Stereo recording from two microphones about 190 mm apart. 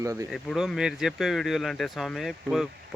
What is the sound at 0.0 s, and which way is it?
Speech, 15° right (ahead or behind).